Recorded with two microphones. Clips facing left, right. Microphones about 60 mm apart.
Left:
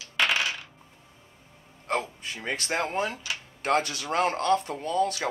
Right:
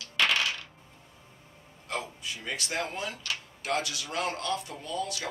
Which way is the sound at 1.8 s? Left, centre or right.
Left.